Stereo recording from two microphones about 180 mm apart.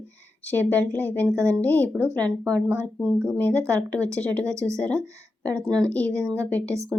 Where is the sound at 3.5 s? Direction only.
15° right (ahead or behind).